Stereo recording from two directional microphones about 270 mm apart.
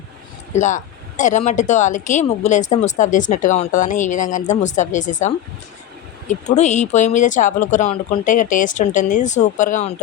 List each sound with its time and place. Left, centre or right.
0.6 s speech: left